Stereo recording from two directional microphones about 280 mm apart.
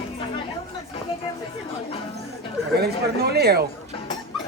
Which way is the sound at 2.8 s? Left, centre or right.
Right.